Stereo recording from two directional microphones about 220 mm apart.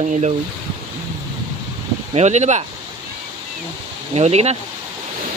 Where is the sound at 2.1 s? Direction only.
30° right (ahead or behind).